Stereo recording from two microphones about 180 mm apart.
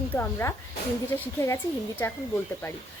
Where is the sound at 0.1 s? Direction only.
15° left (ahead or behind).